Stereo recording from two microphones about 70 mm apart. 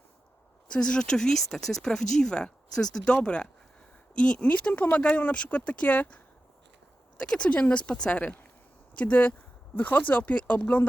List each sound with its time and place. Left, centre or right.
0.7 s speech: centre